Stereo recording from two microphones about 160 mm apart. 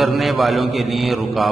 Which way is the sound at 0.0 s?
Centre (ahead or behind).